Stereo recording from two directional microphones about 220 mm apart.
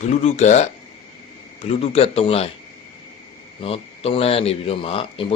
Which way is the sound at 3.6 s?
25° left (ahead or behind).